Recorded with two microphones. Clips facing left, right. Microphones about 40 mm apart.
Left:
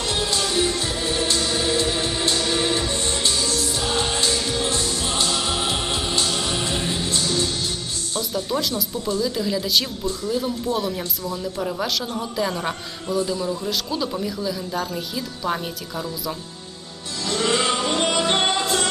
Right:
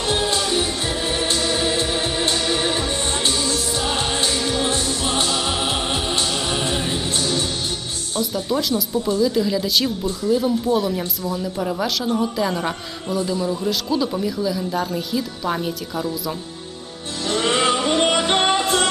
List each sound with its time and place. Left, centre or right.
0.0 s music: right
8.4 s a man's voice: centre
11.2 s speech: right
11.6 s a man's voice: centre
17.2 s music: right